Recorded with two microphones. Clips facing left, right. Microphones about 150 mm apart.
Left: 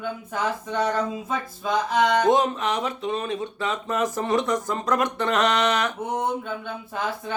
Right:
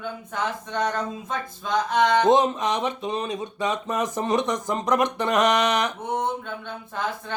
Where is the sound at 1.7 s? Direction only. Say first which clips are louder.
Even; 5° left (ahead or behind).